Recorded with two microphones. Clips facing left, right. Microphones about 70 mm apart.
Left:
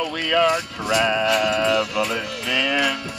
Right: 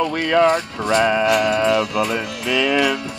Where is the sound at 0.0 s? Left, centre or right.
Right.